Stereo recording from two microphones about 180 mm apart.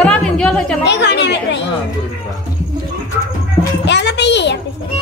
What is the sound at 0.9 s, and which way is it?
Speech, 70° left (ahead or behind).